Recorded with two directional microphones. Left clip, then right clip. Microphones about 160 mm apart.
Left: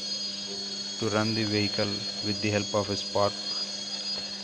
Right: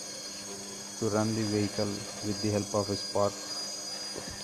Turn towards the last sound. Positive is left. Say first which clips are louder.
# left 3 dB
turn(degrees=25)  # may be behind; listen again after turning